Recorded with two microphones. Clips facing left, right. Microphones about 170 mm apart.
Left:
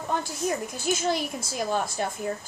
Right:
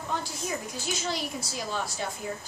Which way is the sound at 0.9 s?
50° left (ahead or behind).